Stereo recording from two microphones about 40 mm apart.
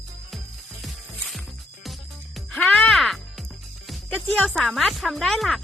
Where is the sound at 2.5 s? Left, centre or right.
Centre.